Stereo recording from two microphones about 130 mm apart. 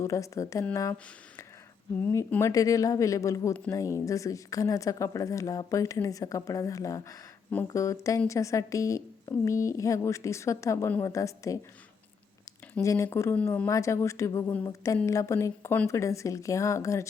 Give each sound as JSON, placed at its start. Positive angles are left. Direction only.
{"t": 0.0, "sound": "speech", "side_deg": 25}
{"t": 2.0, "sound": "speech", "side_deg": 20}
{"t": 12.8, "sound": "speech", "side_deg": 25}
{"t": 13.3, "sound": "speech", "side_deg": 10}